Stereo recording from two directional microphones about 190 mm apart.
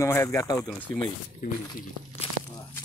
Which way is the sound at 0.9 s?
45° right (ahead or behind).